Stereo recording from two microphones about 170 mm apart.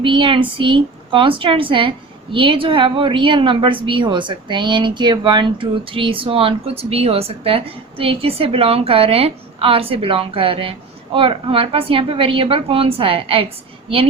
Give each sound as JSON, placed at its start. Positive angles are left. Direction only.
{"t": 0.0, "sound": "a woman's voice", "side_deg": -30}